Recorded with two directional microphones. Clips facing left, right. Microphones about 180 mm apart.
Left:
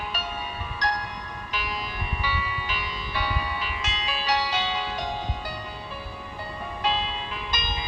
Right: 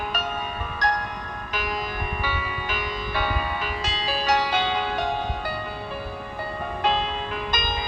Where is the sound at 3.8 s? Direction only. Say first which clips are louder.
Right 4 dB; 35° right (ahead or behind); by 5.1 s 55° right (ahead or behind).